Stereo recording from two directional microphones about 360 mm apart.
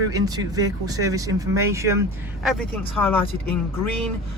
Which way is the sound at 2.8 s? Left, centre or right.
Centre.